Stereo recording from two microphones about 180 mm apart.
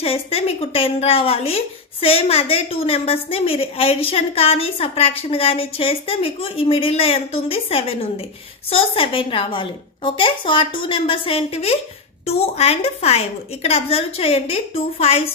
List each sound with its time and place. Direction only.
0.0 s a woman's voice: 35° left (ahead or behind)